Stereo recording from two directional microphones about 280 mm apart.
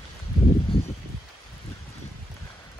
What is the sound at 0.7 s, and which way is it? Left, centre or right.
Rustling leaves, centre.